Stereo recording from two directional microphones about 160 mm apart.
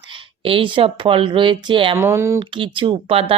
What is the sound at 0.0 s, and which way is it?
Speech, 30° right (ahead or behind).